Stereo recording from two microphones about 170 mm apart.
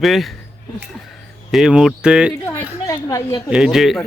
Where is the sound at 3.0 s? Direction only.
20° left (ahead or behind).